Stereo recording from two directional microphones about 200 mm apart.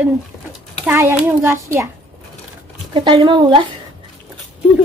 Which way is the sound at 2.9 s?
25° right (ahead or behind).